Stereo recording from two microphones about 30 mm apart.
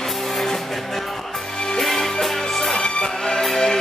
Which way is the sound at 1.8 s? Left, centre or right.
Centre.